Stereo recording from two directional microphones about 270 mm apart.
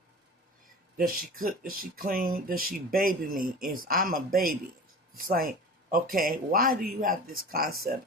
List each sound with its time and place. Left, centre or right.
0.9 s speech: right